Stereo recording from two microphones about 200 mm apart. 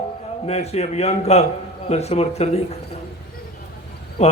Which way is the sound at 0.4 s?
30° left (ahead or behind).